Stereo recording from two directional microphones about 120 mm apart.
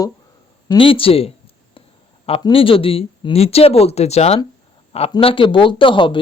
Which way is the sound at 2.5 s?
50° left (ahead or behind).